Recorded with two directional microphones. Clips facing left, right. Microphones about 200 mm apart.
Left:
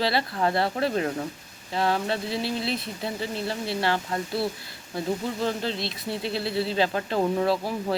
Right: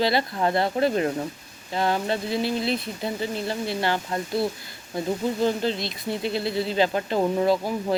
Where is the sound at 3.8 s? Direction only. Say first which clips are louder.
Left 2 dB; 25° right (ahead or behind).